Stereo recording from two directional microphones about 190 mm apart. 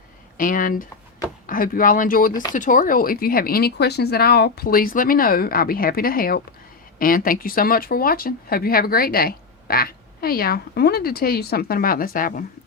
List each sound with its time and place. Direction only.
0.3 s speech: 45° left (ahead or behind)
2.3 s speech: 20° left (ahead or behind)
2.6 s speech: 45° left (ahead or behind)